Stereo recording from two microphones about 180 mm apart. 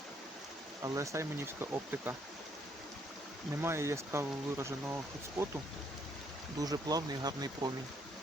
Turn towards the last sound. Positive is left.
turn(degrees=-20)  # may be behind; listen again after turning